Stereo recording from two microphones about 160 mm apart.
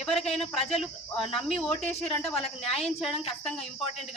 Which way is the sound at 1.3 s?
5° left (ahead or behind).